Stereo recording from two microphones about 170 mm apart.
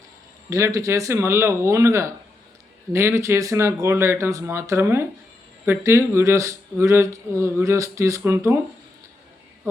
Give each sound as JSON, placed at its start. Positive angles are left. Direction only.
{"t": 0.5, "sound": "speech", "side_deg": -20}